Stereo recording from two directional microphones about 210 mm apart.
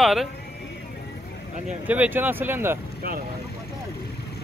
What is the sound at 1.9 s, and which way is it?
Speech, 10° right (ahead or behind).